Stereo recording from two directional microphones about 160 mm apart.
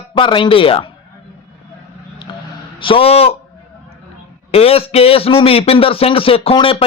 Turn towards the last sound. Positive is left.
turn(degrees=35)  # may be behind; listen again after turning